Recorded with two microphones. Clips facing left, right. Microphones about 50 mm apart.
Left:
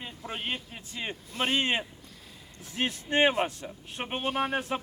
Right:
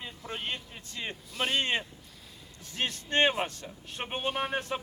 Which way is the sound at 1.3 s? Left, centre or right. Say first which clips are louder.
Left 2 dB; left.